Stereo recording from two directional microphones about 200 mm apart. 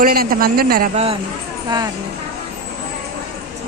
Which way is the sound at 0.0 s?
45° right (ahead or behind).